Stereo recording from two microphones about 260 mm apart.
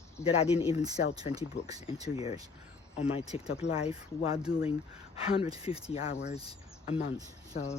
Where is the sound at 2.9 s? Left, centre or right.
Left.